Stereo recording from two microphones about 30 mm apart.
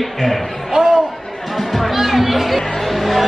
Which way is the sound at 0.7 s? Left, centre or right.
Right.